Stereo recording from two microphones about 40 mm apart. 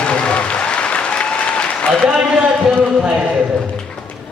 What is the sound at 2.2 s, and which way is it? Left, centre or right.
Speech, right.